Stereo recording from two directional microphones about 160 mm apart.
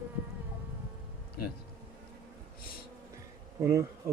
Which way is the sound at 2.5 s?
70° left (ahead or behind).